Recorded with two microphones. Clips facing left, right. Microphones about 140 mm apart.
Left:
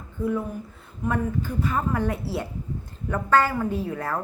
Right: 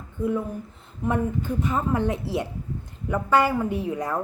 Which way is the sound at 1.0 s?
20° right (ahead or behind).